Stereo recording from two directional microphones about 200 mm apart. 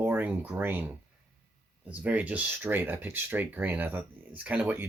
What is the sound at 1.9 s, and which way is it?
Speech, 5° right (ahead or behind).